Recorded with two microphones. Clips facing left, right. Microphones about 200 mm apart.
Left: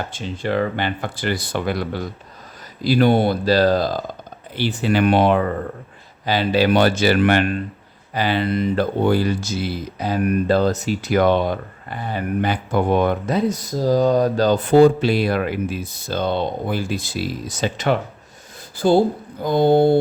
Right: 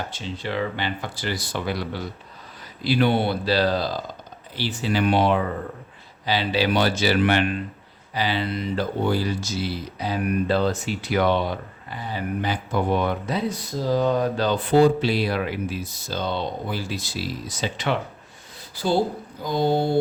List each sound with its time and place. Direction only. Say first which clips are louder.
0.1 s speech: left 6 dB; 50° left (ahead or behind)